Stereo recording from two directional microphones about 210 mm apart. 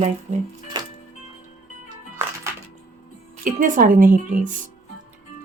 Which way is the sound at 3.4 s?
40° right (ahead or behind).